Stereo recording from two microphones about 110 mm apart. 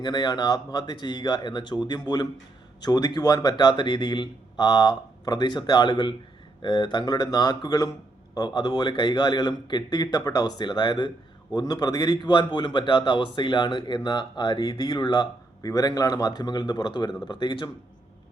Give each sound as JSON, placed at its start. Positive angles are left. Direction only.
{"t": 0.0, "sound": "a man's voice", "side_deg": 40}
{"t": 15.6, "sound": "a man's voice", "side_deg": 35}